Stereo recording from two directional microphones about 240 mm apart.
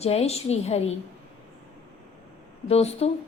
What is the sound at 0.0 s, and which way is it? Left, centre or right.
Speech, left.